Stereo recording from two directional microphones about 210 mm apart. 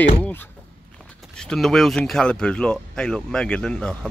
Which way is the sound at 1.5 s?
Centre (ahead or behind).